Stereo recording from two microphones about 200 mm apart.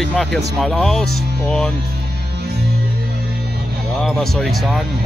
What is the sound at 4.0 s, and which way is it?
Speech, centre (ahead or behind).